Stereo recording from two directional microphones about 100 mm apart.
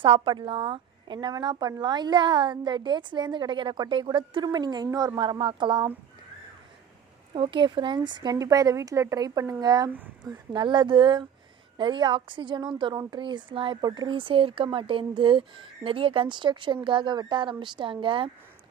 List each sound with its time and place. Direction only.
0.0 s a woman's voice: 60° right (ahead or behind)
7.3 s a woman's voice: 50° right (ahead or behind)
8.4 s speech: 35° right (ahead or behind)
10.5 s a woman's voice: 50° right (ahead or behind)
13.8 s a woman's voice: 40° right (ahead or behind)
14.1 s speech: 60° right (ahead or behind)